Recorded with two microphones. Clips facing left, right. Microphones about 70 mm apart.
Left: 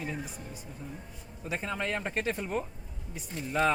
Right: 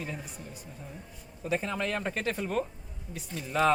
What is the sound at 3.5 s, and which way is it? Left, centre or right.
Speech, centre.